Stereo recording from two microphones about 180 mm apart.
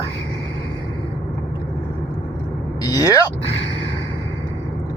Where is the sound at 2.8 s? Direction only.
20° left (ahead or behind).